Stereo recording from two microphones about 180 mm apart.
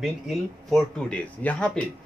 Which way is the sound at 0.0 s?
Centre (ahead or behind).